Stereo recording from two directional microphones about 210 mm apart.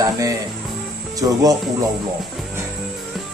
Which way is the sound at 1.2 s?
15° right (ahead or behind).